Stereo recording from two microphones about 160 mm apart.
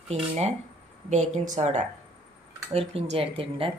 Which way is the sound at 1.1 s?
45° right (ahead or behind).